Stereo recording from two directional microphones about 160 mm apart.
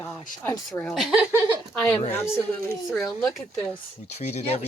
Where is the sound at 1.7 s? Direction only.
20° left (ahead or behind).